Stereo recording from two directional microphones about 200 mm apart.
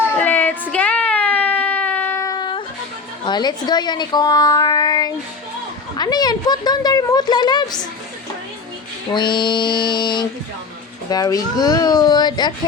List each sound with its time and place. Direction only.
0.2 s child singing: 10° left (ahead or behind)
0.7 s a sound: 5° left (ahead or behind); by 2.6 s 20° left (ahead or behind)
3.2 s a woman's voice: 20° left (ahead or behind)
9.1 s a woman's voice: 25° left (ahead or behind)